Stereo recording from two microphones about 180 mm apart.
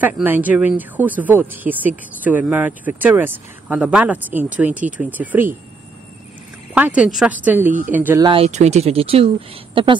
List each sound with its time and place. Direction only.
0.0 s speech: 10° right (ahead or behind)
6.7 s speech: 5° right (ahead or behind)
8.2 s speech: 30° right (ahead or behind)